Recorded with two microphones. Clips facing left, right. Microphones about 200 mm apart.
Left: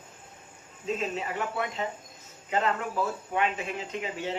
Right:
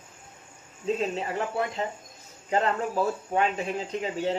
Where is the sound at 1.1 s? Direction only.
35° right (ahead or behind).